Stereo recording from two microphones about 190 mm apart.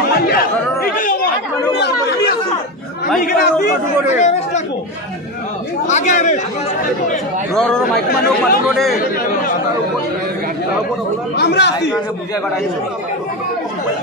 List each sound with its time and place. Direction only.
0.1 s chatter: 55° left (ahead or behind)
1.8 s chatter: 60° left (ahead or behind)
3.2 s speech: 50° left (ahead or behind)
5.9 s speech: 40° left (ahead or behind)
7.5 s speech: 5° left (ahead or behind)
8.1 s speech: 55° left (ahead or behind)
8.6 s speech: centre (ahead or behind)
11.3 s speech: 60° left (ahead or behind)